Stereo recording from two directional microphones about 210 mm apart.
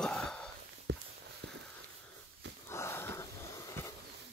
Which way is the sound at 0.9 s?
55° right (ahead or behind).